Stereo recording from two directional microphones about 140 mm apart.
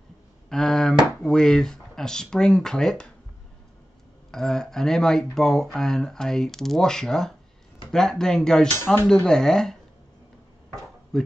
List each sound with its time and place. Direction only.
0.5 s speech: 5° left (ahead or behind)
4.3 s speech: 5° left (ahead or behind)
8.7 s speech: 15° left (ahead or behind)
9.0 s speech: 5° left (ahead or behind)
11.1 s speech: 5° left (ahead or behind)